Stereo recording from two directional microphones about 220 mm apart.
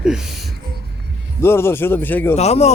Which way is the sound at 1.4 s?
10° left (ahead or behind).